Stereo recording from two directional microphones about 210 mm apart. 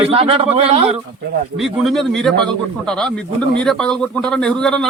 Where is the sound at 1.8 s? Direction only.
Centre (ahead or behind).